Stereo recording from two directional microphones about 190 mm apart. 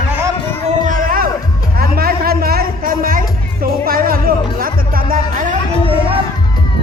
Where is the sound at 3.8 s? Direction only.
50° right (ahead or behind).